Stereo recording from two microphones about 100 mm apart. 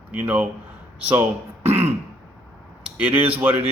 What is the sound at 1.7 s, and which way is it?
Throat clearing, 90° right.